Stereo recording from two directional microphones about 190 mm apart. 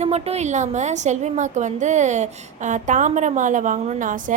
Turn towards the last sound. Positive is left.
turn(degrees=-45)  # may be behind; listen again after turning